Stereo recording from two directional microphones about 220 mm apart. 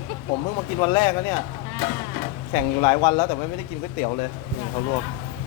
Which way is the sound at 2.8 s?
20° left (ahead or behind).